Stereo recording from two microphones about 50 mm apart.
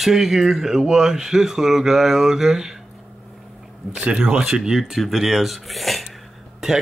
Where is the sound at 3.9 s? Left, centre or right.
Centre.